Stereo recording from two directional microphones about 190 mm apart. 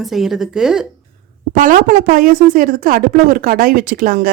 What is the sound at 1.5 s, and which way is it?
Speech, 45° right (ahead or behind).